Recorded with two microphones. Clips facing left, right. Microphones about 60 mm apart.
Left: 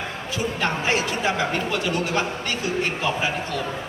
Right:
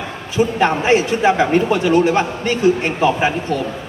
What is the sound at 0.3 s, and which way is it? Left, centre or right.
A man's voice, right.